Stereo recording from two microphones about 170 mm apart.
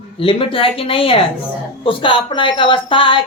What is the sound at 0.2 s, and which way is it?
Speech, 30° left (ahead or behind).